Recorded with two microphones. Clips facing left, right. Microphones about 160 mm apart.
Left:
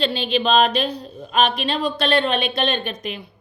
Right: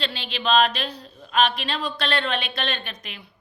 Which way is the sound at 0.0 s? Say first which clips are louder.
Left 8 dB; 20° left (ahead or behind).